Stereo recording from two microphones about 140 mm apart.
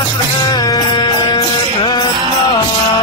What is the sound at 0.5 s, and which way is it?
Music, 30° left (ahead or behind).